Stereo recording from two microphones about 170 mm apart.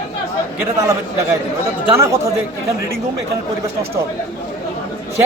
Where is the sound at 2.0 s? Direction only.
15° right (ahead or behind).